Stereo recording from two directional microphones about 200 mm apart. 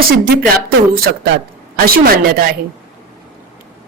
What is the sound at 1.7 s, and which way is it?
Speech, 45° right (ahead or behind).